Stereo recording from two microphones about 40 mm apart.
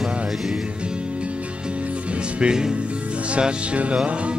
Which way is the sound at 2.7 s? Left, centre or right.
Right.